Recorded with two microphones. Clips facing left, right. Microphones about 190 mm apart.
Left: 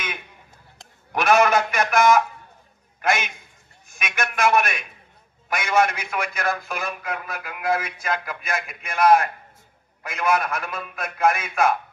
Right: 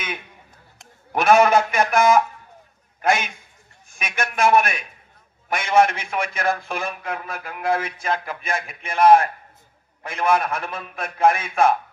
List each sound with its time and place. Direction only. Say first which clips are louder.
1.1 s a man's voice: right 3 dB; 30° right (ahead or behind)